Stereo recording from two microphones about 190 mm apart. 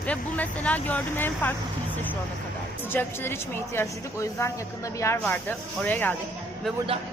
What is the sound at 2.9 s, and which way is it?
A woman's voice, 10° left (ahead or behind).